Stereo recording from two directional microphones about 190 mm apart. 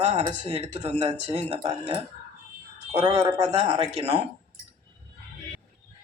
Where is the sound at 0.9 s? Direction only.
35° right (ahead or behind).